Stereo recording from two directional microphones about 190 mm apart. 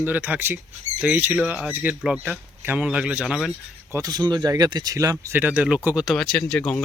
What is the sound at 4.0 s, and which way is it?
Speech, 20° right (ahead or behind).